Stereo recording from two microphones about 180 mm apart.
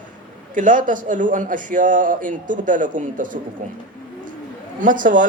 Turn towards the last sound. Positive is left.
turn(degrees=-45)  # may be behind; listen again after turning